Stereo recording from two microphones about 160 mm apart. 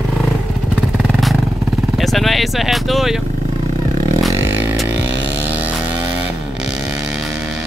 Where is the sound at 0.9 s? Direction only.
Centre (ahead or behind).